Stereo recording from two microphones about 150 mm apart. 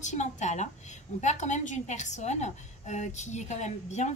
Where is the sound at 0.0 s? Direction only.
50° left (ahead or behind).